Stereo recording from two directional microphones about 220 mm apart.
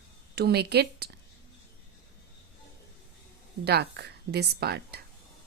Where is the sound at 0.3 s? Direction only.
45° right (ahead or behind).